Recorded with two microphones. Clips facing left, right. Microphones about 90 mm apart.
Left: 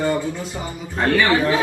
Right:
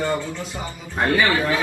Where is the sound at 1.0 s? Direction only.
20° right (ahead or behind).